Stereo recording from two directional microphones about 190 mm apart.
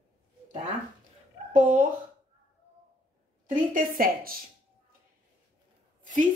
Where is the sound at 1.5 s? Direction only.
45° right (ahead or behind).